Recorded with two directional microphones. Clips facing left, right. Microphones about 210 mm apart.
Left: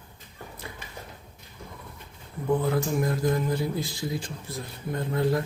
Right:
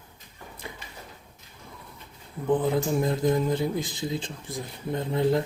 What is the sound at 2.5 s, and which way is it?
Speech, 15° right (ahead or behind).